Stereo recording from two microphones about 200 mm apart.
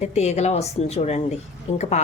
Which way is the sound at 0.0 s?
35° left (ahead or behind).